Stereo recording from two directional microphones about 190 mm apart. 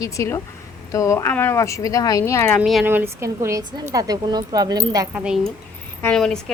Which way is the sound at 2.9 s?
10° right (ahead or behind).